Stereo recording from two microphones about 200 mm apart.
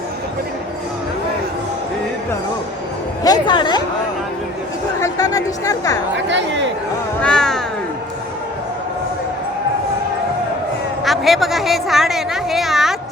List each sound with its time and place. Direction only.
3.2 s a woman's voice: 20° left (ahead or behind)
4.9 s speech: 15° left (ahead or behind)
6.2 s speech: 65° right (ahead or behind)
7.2 s a sound: 5° left (ahead or behind)
11.0 s a woman's voice: centre (ahead or behind)